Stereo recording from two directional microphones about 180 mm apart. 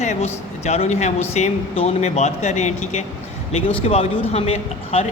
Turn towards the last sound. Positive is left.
turn(degrees=35)  # may be behind; listen again after turning